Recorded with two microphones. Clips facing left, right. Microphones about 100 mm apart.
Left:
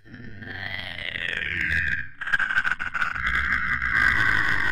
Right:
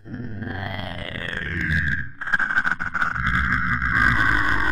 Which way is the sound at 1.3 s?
25° right (ahead or behind).